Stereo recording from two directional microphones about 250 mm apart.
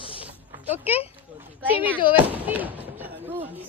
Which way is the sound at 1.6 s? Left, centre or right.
Centre.